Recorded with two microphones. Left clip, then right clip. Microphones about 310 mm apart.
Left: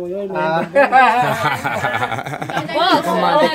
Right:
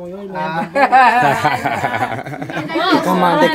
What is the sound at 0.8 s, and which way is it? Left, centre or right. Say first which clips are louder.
Speech: right 2 dB; right.